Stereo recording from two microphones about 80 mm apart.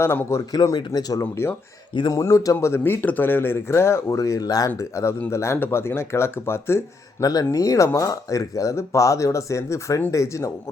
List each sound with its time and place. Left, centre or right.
0.0 s speech: left
0.5 s speech: left
1.2 s speech: left
4.8 s speech: left
7.2 s speech: left